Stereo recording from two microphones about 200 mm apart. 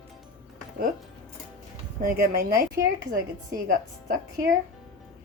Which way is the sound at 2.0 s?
45° right (ahead or behind).